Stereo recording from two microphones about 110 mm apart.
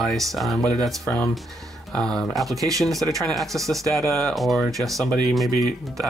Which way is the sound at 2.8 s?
Centre (ahead or behind).